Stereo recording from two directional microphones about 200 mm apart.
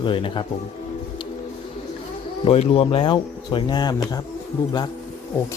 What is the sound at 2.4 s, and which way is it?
Speech, 30° left (ahead or behind).